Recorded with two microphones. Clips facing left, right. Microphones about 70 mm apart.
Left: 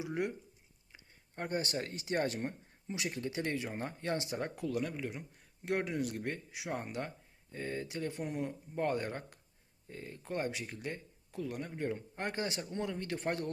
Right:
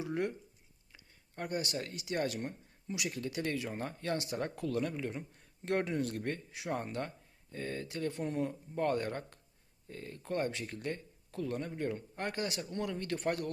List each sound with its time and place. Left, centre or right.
0.0 s speech: centre
0.9 s speech: left; by 8.4 s centre
8.4 s speech: centre